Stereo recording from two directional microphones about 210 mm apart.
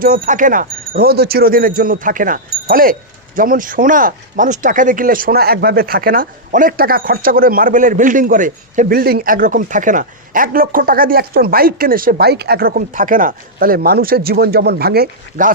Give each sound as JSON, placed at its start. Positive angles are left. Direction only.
{"t": 0.0, "sound": "speech", "side_deg": -40}